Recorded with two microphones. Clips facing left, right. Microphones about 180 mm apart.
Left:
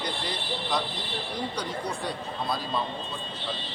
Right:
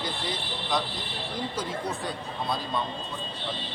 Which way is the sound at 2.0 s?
Centre (ahead or behind).